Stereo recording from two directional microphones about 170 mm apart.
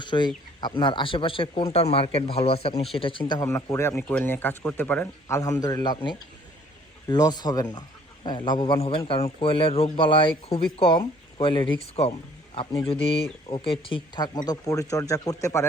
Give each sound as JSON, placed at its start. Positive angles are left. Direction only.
{"t": 0.0, "sound": "speech", "side_deg": 25}
{"t": 5.4, "sound": "speech", "side_deg": 20}
{"t": 13.5, "sound": "speech", "side_deg": 30}